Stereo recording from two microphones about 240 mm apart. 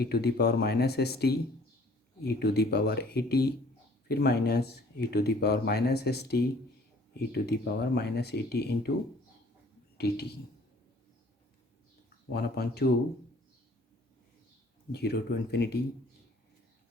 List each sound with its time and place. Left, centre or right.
0.0 s speech: left
7.4 s speech: left
10.0 s speech: left
12.3 s speech: left
14.9 s speech: left